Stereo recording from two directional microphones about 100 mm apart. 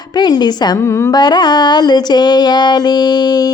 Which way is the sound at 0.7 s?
25° left (ahead or behind).